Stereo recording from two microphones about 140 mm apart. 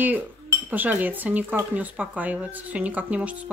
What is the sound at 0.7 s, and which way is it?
Speech, 10° right (ahead or behind).